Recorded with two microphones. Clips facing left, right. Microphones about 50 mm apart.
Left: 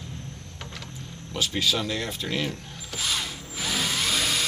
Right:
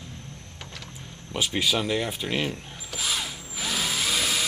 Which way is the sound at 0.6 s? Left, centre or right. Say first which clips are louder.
Left 2 dB; centre.